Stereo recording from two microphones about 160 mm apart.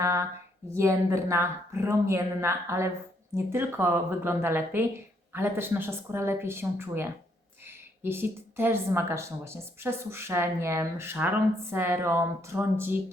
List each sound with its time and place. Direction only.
0.0 s speech: 20° right (ahead or behind)